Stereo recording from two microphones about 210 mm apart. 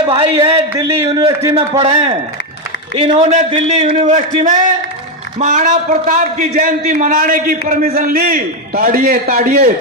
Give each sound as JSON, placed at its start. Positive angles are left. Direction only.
{"t": 0.0, "sound": "a man's voice", "side_deg": -20}